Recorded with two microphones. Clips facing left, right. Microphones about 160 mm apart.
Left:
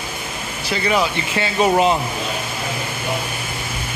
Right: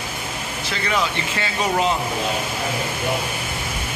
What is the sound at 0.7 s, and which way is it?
Speech, 15° left (ahead or behind).